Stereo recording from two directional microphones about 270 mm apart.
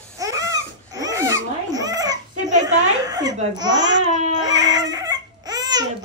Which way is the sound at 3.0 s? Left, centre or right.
Centre.